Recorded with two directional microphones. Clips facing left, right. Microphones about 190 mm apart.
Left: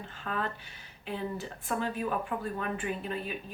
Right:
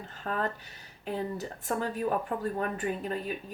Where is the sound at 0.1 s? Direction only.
40° right (ahead or behind).